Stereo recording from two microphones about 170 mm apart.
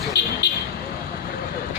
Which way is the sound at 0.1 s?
75° left (ahead or behind).